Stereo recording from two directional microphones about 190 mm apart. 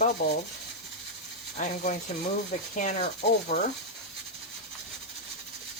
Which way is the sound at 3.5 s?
50° left (ahead or behind).